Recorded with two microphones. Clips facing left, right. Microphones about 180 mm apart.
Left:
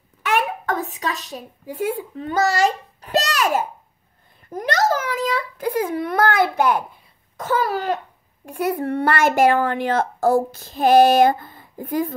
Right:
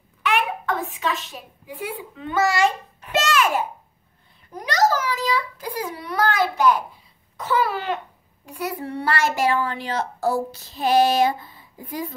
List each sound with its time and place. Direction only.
0.2 s a child's voice: 45° left (ahead or behind)
4.5 s a child's voice: 50° left (ahead or behind)
7.3 s speech: 45° left (ahead or behind)
8.5 s speech: 55° left (ahead or behind)